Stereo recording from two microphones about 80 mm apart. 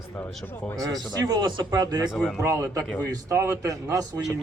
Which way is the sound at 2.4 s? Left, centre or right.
Right.